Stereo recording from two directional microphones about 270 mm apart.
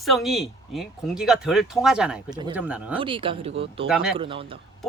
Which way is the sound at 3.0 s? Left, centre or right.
Centre.